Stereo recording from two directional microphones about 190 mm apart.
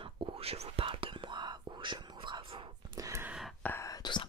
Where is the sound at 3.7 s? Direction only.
15° left (ahead or behind).